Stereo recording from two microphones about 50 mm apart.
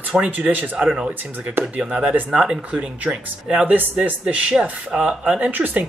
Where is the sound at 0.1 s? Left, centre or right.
Right.